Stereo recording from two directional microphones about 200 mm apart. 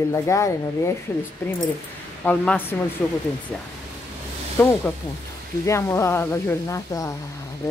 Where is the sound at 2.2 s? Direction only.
10° left (ahead or behind).